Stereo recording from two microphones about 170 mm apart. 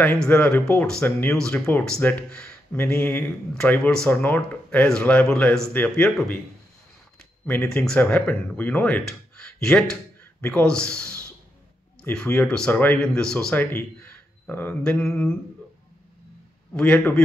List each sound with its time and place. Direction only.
0.2 s speech: 5° left (ahead or behind)
7.2 s a sound: 10° left (ahead or behind)
7.8 s speech: 5° left (ahead or behind)
16.7 s speech: 10° left (ahead or behind)